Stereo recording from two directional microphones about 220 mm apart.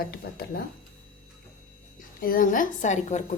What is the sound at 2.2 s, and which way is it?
A woman's voice, 40° left (ahead or behind).